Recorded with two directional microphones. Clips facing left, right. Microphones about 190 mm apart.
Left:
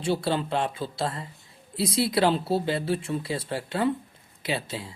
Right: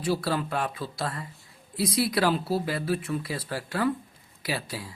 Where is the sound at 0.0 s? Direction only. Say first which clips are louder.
Left 1 dB; 25° left (ahead or behind).